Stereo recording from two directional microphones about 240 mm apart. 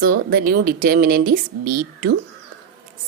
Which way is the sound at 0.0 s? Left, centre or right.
Right.